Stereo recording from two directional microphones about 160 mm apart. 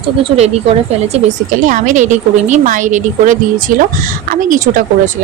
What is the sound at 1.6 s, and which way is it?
A woman's voice, 55° right (ahead or behind).